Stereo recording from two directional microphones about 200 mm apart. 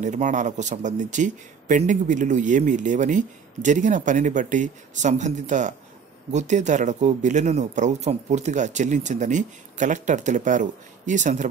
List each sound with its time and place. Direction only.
0.0 s speech: 40° right (ahead or behind)